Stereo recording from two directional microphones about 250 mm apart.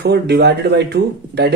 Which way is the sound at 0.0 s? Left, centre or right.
Right.